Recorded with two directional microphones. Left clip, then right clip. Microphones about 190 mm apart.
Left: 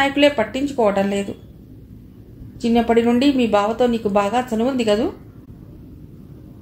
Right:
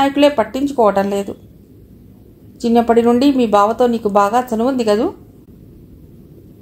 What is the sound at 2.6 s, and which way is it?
Speech, 30° right (ahead or behind).